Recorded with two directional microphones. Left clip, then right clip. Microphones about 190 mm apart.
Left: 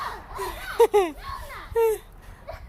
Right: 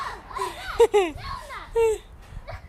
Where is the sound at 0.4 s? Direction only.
5° left (ahead or behind).